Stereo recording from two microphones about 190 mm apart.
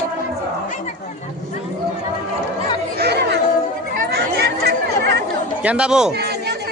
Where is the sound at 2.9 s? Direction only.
60° right (ahead or behind).